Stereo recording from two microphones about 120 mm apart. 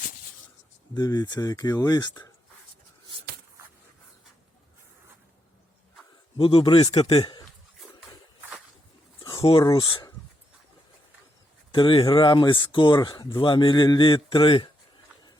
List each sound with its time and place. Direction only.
0.9 s speech: 30° left (ahead or behind)
6.3 s speech: 45° left (ahead or behind)
7.0 s speech: 45° left (ahead or behind)
9.2 s a sound: 45° left (ahead or behind)
9.6 s speech: 40° left (ahead or behind)
11.7 s speech: 45° left (ahead or behind)